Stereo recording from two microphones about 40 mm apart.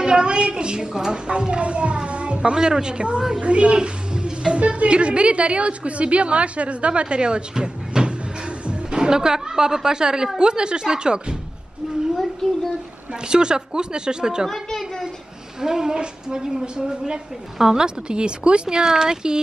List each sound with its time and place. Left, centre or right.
0.0 s a woman's voice: right
13.3 s a woman's voice: centre
14.5 s a sound: centre
15.6 s a woman's voice: centre